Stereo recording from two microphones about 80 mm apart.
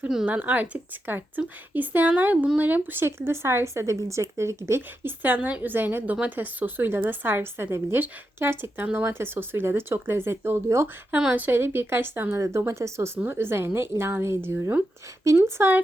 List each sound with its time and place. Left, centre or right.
0.3 s a woman's voice: centre
11.3 s a woman's voice: right